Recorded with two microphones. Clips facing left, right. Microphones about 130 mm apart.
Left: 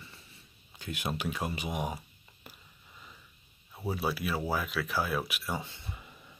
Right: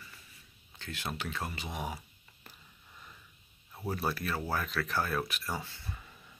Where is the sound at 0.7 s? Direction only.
15° left (ahead or behind).